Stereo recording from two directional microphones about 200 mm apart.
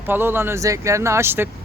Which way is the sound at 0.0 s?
10° right (ahead or behind).